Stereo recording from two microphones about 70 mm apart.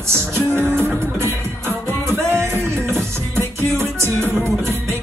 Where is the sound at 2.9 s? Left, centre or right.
Right.